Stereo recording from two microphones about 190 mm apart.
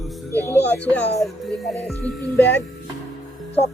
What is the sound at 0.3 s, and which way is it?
Speech, 10° left (ahead or behind).